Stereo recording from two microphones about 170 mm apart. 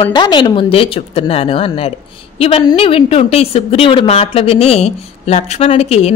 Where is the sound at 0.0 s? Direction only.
25° left (ahead or behind).